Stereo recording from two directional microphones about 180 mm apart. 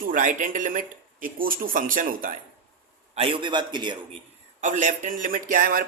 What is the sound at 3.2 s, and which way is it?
Speech, 30° right (ahead or behind).